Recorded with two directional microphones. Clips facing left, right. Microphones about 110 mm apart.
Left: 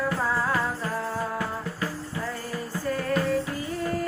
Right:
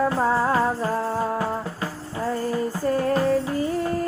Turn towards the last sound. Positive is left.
turn(degrees=-35)  # may be behind; listen again after turning